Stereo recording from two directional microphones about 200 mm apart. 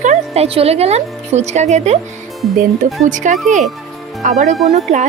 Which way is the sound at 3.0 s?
40° right (ahead or behind).